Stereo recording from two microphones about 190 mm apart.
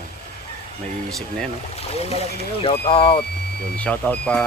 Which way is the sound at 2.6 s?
30° left (ahead or behind).